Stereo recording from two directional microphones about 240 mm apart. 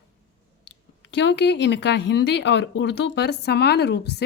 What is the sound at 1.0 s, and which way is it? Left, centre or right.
Speech, left.